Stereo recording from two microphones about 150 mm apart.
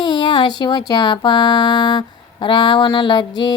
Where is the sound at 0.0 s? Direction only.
30° left (ahead or behind).